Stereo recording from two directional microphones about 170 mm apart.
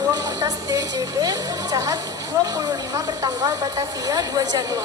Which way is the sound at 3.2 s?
20° right (ahead or behind).